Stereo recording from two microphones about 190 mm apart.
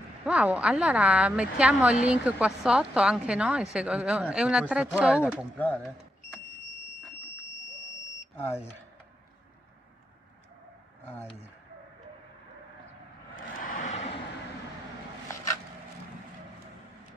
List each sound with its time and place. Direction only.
0.2 s speech: 5° right (ahead or behind)
5.6 s speech: 10° left (ahead or behind)
11.1 s speech: 10° left (ahead or behind)
13.6 s vehicle: 45° left (ahead or behind)